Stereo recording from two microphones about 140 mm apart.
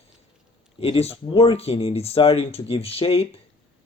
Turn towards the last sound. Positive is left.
turn(degrees=45)  # may be behind; listen again after turning